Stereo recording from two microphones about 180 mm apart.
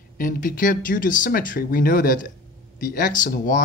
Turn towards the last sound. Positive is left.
turn(degrees=50)  # may be behind; listen again after turning